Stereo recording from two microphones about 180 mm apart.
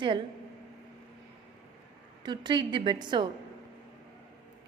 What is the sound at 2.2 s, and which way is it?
A woman's voice, 25° right (ahead or behind).